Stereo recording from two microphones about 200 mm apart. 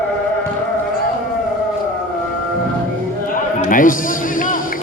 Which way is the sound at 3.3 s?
45° left (ahead or behind).